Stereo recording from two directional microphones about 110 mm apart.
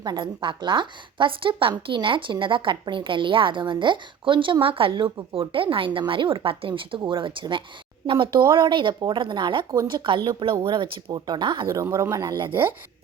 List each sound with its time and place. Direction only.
0.0 s speech: 40° right (ahead or behind)
11.7 s speech: 25° right (ahead or behind)
12.2 s speech: 45° right (ahead or behind)